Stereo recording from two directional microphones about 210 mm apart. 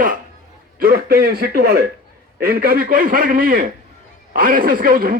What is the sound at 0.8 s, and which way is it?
Speech, 45° right (ahead or behind).